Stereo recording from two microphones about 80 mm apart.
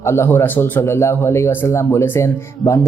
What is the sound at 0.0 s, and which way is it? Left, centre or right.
Speech, left.